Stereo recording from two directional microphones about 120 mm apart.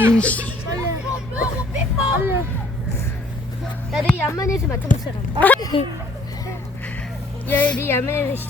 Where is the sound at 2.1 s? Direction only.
20° right (ahead or behind).